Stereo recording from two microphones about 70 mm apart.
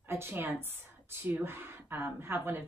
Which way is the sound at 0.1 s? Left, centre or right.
Right.